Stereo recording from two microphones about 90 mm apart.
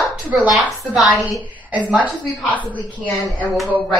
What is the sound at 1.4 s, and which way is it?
Speech, 15° right (ahead or behind).